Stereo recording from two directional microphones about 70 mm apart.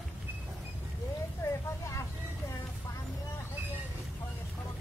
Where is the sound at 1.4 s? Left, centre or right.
Left.